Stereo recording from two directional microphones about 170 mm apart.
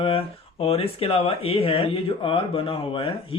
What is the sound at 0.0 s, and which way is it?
Speech, 35° left (ahead or behind).